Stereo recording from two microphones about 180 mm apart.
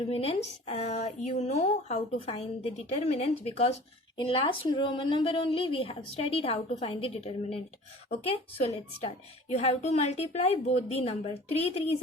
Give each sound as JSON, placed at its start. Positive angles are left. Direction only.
{"t": 0.1, "sound": "a woman's voice", "side_deg": 35}